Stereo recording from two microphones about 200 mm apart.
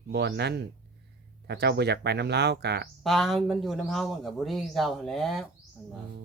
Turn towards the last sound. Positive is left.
turn(degrees=0)  # may be behind; listen again after turning